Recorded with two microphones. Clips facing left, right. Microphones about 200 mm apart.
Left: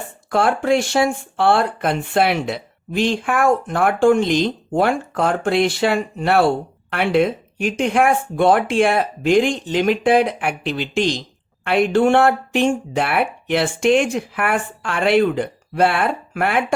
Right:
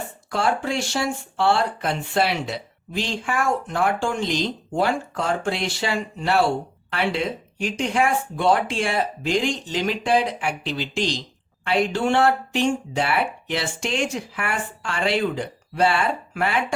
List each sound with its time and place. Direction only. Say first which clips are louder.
0.3 s speech: left 7 dB; 55° left (ahead or behind)